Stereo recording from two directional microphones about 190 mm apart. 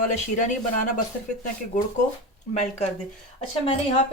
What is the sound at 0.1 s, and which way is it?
Speech, 40° left (ahead or behind).